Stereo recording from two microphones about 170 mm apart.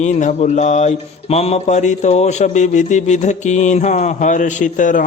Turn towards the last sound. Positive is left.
turn(degrees=50)  # may be behind; listen again after turning